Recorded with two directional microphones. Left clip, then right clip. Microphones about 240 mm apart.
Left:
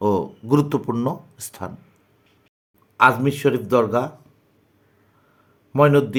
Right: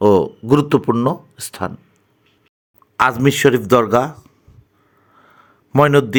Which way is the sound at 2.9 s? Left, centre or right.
Right.